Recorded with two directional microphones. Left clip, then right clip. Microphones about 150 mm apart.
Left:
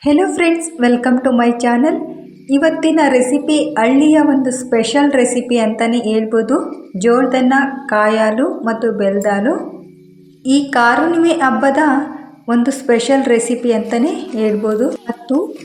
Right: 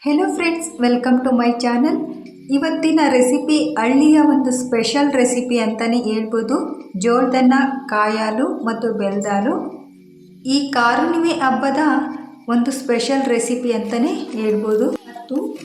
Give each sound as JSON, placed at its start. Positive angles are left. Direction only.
{"t": 0.0, "sound": "a woman's voice", "side_deg": 25}